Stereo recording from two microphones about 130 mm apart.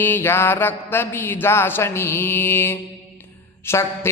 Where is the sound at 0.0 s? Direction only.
15° left (ahead or behind).